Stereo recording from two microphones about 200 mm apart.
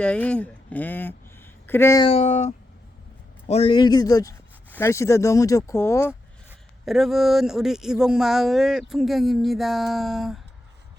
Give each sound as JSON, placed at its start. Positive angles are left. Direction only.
{"t": 0.0, "sound": "speech", "side_deg": 5}
{"t": 2.0, "sound": "speech", "side_deg": 35}
{"t": 6.8, "sound": "speech", "side_deg": 0}